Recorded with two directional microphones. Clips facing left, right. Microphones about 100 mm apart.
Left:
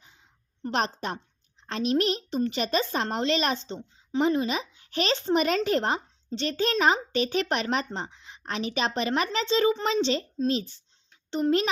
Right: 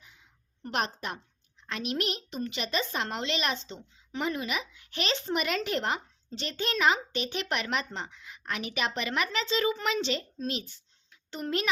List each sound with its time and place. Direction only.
0.6 s a woman's voice: 30° left (ahead or behind)